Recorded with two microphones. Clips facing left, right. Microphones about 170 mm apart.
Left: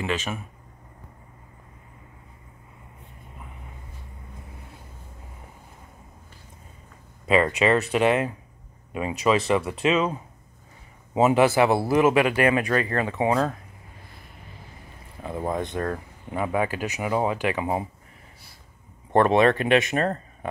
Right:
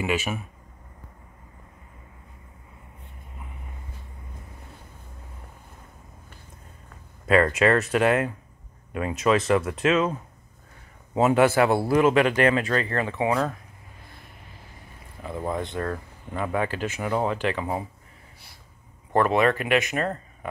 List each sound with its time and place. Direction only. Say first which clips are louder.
0.0 s speech: right 2 dB; 10° right (ahead or behind)
7.2 s speech: right 1 dB; centre (ahead or behind)
11.3 s speech: right 1 dB; centre (ahead or behind)
11.9 s speech: even; 15° left (ahead or behind)
15.2 s speech: left 1 dB; 20° left (ahead or behind)
19.1 s speech: left 3 dB; 25° left (ahead or behind)